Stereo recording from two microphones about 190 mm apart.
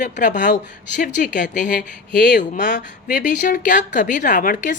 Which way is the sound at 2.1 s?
65° left (ahead or behind).